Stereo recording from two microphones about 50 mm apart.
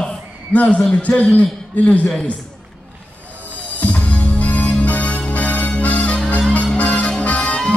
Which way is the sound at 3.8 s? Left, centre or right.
Left.